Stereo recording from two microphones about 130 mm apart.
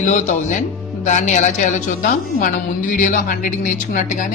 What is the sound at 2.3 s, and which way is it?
A woman's voice, 90° left.